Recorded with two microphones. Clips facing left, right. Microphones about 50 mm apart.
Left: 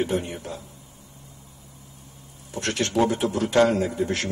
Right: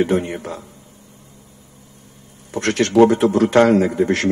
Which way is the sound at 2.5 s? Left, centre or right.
Right.